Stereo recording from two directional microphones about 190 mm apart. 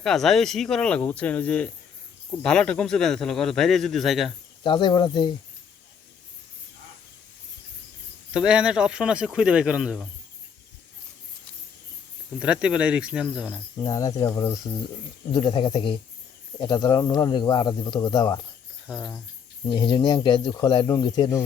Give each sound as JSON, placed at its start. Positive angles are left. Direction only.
{"t": 0.0, "sound": "speech", "side_deg": 0}
{"t": 4.6, "sound": "speech", "side_deg": 25}
{"t": 8.3, "sound": "speech", "side_deg": -5}
{"t": 12.4, "sound": "speech", "side_deg": -5}
{"t": 13.8, "sound": "speech", "side_deg": 20}
{"t": 18.9, "sound": "speech", "side_deg": 0}
{"t": 19.7, "sound": "speech", "side_deg": 25}